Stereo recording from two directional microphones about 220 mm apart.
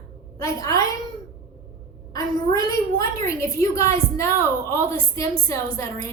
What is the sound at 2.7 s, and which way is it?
A woman's voice, 15° left (ahead or behind).